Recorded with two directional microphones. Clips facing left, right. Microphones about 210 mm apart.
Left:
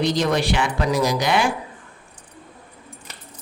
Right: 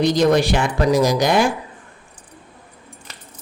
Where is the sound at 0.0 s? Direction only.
45° right (ahead or behind).